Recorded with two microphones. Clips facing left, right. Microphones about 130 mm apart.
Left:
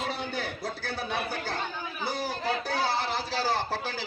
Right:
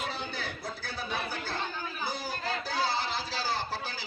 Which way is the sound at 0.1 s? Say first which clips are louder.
Left 4 dB; 55° left (ahead or behind).